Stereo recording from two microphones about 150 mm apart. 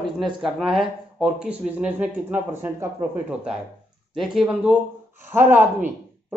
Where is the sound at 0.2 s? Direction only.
Centre (ahead or behind).